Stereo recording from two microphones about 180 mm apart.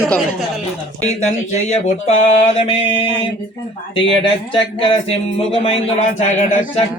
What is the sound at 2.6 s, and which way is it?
Mantra, 30° left (ahead or behind).